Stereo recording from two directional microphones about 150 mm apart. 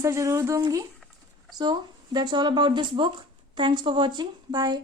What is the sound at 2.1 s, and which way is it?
Speech, 30° right (ahead or behind).